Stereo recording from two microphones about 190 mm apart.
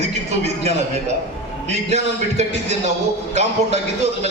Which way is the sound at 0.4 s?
35° right (ahead or behind).